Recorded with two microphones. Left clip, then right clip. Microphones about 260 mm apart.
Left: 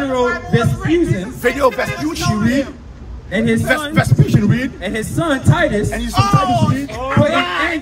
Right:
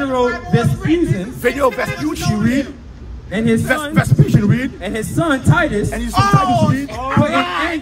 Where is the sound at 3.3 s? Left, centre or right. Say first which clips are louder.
Left 1 dB; centre.